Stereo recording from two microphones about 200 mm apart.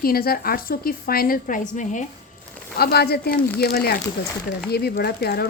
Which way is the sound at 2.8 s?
50° left (ahead or behind).